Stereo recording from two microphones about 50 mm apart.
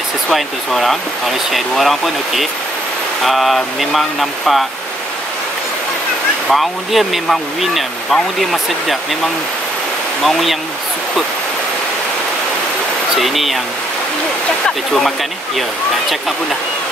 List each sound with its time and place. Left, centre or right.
0.3 s speech: centre
6.5 s speech: centre
10.2 s speech: centre
13.2 s speech: centre
15.0 s speech: centre